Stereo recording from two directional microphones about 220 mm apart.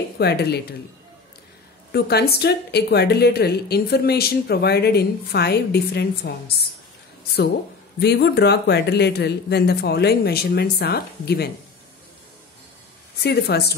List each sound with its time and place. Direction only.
0.2 s speech: 50° left (ahead or behind)
1.9 s speech: 45° left (ahead or behind)
8.0 s speech: 50° left (ahead or behind)
13.2 s speech: 45° left (ahead or behind)